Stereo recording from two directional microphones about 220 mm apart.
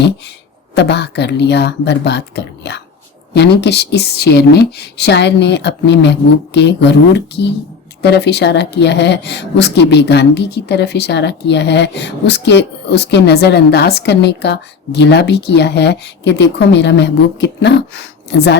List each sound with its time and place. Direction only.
0.8 s speech: 50° left (ahead or behind)